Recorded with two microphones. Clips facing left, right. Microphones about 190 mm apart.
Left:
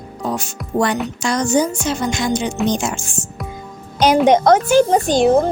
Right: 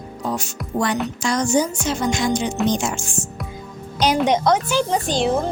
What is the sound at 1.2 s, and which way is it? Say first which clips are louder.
Speech: left 3 dB; 65° left (ahead or behind).